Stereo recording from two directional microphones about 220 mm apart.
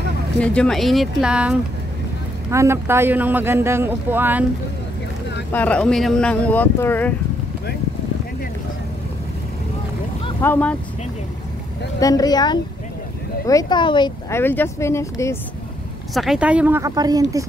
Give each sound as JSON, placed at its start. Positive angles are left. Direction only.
{"t": 0.4, "sound": "a man's voice", "side_deg": 5}
{"t": 5.5, "sound": "speech", "side_deg": 5}
{"t": 10.4, "sound": "speech", "side_deg": 10}
{"t": 12.0, "sound": "speech", "side_deg": 15}
{"t": 16.2, "sound": "a man's voice", "side_deg": -5}